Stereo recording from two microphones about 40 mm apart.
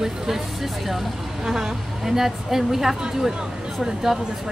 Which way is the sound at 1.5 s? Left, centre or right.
Centre.